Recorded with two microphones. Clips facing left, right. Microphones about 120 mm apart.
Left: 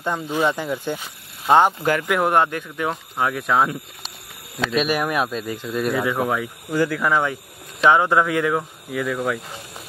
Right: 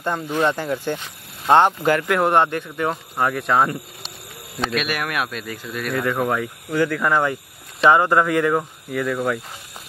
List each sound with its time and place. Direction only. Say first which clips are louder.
0.0 s speech: right 1 dB; 10° left (ahead or behind)
4.8 s speech: left 4 dB; 15° left (ahead or behind)
5.1 s speech: left 3 dB; 25° left (ahead or behind)
5.8 s speech: left 1 dB; 5° left (ahead or behind)